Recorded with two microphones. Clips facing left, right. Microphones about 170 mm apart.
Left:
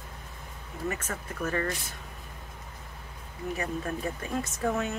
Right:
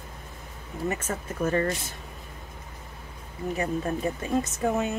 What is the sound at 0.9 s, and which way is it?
Speech, 25° right (ahead or behind).